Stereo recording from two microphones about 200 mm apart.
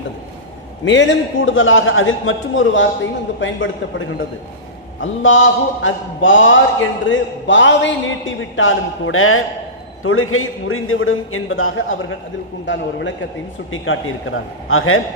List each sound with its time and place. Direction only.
0.9 s mantra: 65° left (ahead or behind); by 9.4 s 90° left
10.0 s a man's voice: 90° left
12.6 s a man's voice: 65° left (ahead or behind)
13.7 s a man's voice: 80° left